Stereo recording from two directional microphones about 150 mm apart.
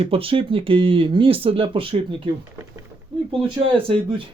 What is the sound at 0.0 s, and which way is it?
Speech, 40° right (ahead or behind).